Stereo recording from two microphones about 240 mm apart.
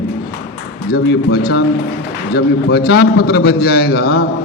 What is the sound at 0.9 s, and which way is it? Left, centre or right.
A man's voice, left.